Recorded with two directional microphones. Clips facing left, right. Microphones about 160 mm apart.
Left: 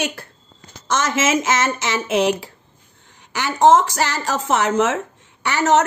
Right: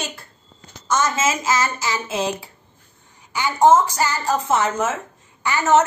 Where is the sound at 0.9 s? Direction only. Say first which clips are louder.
Left 2 dB; 90° left.